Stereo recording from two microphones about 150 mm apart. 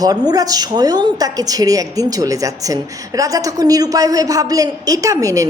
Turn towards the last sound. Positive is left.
turn(degrees=-25)  # may be behind; listen again after turning